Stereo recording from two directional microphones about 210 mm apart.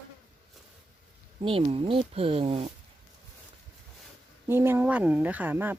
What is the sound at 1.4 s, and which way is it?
Speech, 25° right (ahead or behind).